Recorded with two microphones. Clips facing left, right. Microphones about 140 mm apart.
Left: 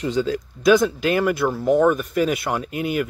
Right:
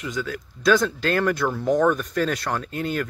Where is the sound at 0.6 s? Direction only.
10° left (ahead or behind).